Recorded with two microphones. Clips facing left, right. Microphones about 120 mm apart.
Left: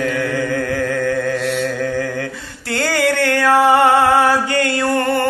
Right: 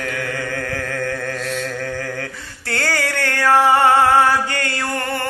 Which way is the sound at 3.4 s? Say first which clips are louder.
Left 1 dB; 20° left (ahead or behind).